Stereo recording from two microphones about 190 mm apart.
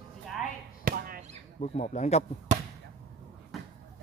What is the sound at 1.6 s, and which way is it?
Speech, 35° left (ahead or behind).